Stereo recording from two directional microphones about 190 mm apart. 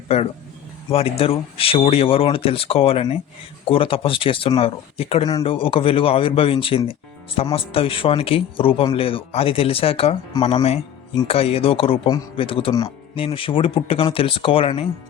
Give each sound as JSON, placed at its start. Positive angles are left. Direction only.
{"t": 0.1, "sound": "speech", "side_deg": 30}